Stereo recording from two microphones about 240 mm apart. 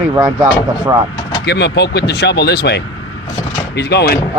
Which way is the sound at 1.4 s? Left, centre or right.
Left.